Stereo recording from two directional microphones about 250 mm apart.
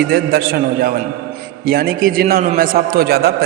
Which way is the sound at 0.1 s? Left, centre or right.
Right.